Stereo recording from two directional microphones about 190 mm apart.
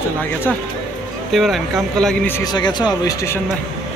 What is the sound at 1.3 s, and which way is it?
Speech, centre (ahead or behind).